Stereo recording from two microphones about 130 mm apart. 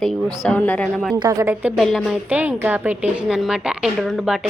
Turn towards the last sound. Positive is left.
turn(degrees=0)  # may be behind; listen again after turning